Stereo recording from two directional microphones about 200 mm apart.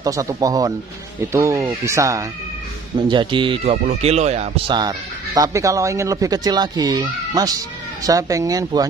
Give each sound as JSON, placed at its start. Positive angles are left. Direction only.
{"t": 0.0, "sound": "speech", "side_deg": -15}
{"t": 4.7, "sound": "speech", "side_deg": -20}